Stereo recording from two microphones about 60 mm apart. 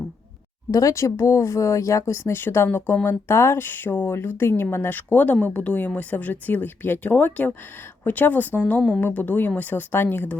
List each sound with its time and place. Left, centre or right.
0.7 s speech: left
2.0 s speech: left
4.4 s speech: left